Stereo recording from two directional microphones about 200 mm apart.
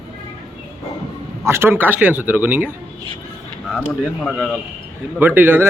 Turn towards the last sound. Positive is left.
turn(degrees=-10)  # may be behind; listen again after turning